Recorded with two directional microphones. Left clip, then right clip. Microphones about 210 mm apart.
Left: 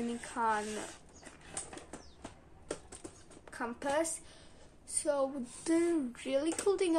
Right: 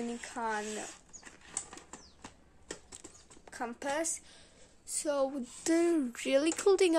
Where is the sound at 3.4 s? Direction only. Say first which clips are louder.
Even; 40° right (ahead or behind).